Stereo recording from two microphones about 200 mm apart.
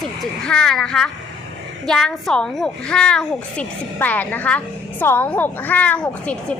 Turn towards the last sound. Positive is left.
turn(degrees=5)  # may be behind; listen again after turning